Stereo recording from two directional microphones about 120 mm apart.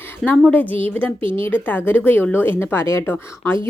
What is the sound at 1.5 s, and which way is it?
A woman's voice, 15° left (ahead or behind).